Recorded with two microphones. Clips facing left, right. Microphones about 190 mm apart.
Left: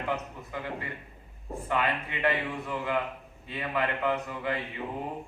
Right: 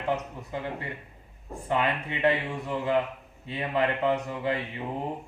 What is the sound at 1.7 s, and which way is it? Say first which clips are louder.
A man's voice: right 3 dB; 20° right (ahead or behind).